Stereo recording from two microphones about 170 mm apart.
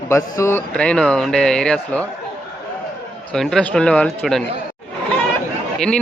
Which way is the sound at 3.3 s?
Centre (ahead or behind).